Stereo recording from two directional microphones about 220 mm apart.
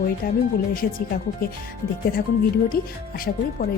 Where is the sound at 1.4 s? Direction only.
40° left (ahead or behind).